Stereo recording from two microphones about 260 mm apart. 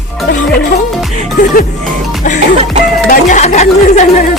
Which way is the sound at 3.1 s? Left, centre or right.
Left.